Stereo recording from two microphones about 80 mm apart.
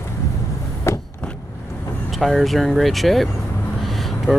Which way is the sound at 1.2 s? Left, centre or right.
Centre.